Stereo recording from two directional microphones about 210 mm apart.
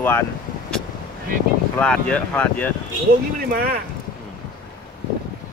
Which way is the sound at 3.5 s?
45° right (ahead or behind).